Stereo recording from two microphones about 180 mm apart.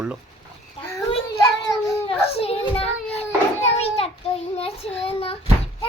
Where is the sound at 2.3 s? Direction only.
35° left (ahead or behind).